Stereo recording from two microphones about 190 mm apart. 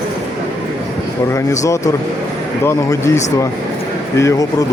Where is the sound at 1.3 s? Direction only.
15° left (ahead or behind).